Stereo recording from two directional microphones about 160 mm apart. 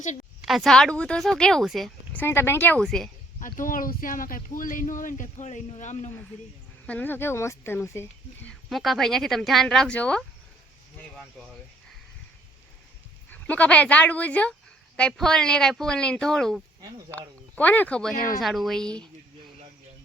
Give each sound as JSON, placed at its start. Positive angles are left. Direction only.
{"t": 0.4, "sound": "speech", "side_deg": 0}
{"t": 2.1, "sound": "speech", "side_deg": 15}
{"t": 3.4, "sound": "speech", "side_deg": 60}
{"t": 6.8, "sound": "speech", "side_deg": 10}
{"t": 8.7, "sound": "speech", "side_deg": 0}
{"t": 13.3, "sound": "speech", "side_deg": 10}